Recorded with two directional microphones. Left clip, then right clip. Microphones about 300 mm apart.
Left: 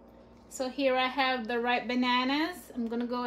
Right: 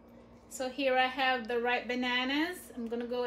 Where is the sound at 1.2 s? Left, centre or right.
Left.